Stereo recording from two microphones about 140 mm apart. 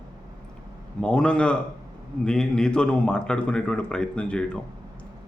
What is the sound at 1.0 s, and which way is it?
Speech, 5° left (ahead or behind).